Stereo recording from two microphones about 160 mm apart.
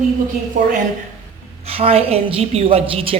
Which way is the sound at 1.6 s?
40° right (ahead or behind).